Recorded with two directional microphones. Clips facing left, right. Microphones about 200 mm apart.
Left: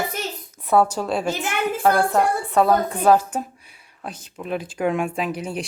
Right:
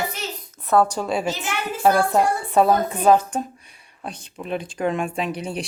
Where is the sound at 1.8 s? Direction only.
10° right (ahead or behind).